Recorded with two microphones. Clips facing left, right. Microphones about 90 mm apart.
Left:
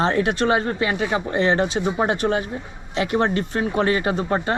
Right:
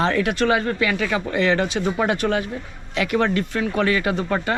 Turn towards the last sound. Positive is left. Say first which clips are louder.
# left 1 dB
turn(degrees=30)  # may be behind; listen again after turning